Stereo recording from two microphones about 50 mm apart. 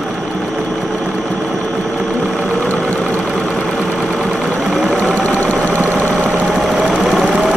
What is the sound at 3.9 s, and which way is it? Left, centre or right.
Sewing machine, centre.